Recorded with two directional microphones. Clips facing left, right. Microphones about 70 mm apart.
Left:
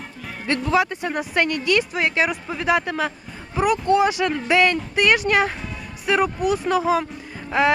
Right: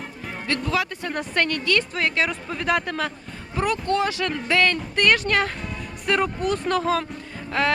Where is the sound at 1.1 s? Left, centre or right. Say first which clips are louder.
Left 2 dB; centre.